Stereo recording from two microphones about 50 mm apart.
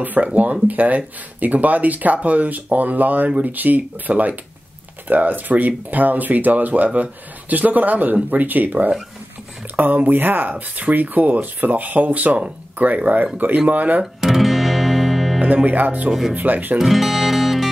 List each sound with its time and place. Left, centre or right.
0.0 s speech: right
14.2 s music: centre
15.4 s speech: right
16.1 s speech: centre
16.3 s speech: right
16.7 s music: centre